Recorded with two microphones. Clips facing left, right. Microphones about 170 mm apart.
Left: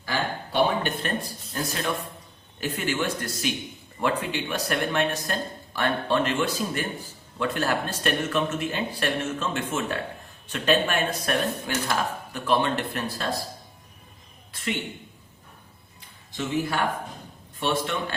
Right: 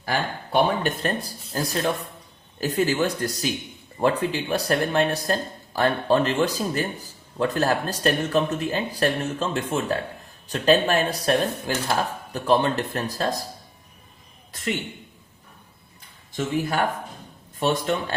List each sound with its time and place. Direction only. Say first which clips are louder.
0.0 s speech: right 2 dB; 50° right (ahead or behind)
16.3 s speech: right 2 dB; 50° right (ahead or behind)